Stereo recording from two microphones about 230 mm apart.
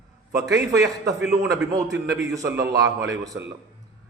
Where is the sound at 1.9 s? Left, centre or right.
Right.